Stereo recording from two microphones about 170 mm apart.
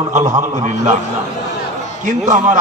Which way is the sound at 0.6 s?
45° right (ahead or behind).